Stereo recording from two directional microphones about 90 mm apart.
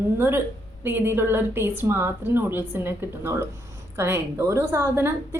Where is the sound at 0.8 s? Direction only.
25° right (ahead or behind).